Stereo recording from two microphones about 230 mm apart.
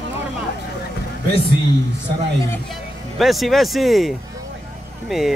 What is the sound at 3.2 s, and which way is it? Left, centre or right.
Speech, centre.